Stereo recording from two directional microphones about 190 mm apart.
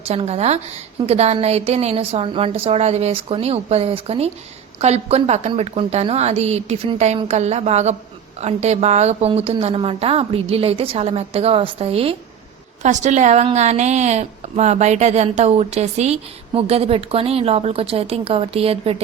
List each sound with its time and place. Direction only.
0.0 s a woman's voice: 35° right (ahead or behind)